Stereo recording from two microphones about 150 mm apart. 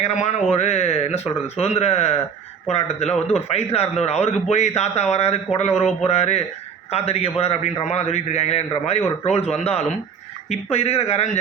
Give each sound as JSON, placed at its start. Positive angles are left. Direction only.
{"t": 0.0, "sound": "a man's voice", "side_deg": 50}